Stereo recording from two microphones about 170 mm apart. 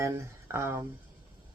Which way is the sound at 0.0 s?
15° right (ahead or behind).